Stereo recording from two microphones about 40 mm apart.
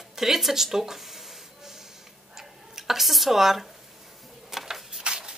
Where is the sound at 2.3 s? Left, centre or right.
Centre.